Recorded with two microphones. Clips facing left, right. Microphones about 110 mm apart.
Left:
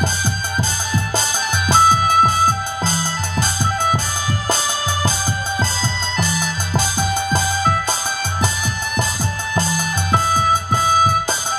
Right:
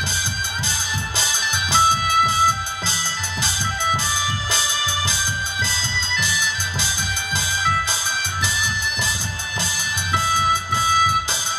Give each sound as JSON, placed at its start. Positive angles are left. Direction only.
{"t": 1.7, "sound": "music", "side_deg": 45}
{"t": 5.6, "sound": "music", "side_deg": 45}
{"t": 10.1, "sound": "music", "side_deg": 45}